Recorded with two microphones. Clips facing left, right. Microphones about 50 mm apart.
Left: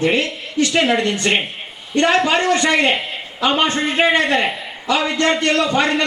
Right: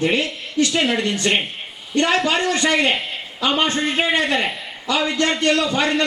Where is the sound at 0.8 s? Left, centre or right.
Centre.